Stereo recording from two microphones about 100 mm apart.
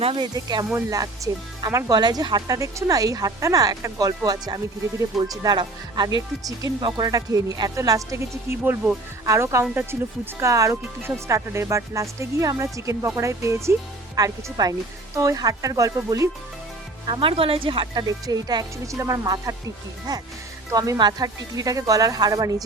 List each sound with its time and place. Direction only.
0.0 s speech: 60° right (ahead or behind)
0.3 s speech: 40° right (ahead or behind)
7.1 s speech: 35° right (ahead or behind)
9.2 s speech: 30° right (ahead or behind)
14.2 s speech: 40° right (ahead or behind)
17.2 s speech: 65° right (ahead or behind); by 22.5 s 40° right (ahead or behind)